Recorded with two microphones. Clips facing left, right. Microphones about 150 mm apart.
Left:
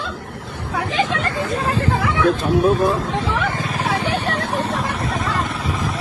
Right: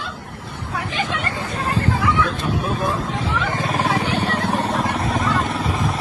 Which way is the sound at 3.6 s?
40° right (ahead or behind).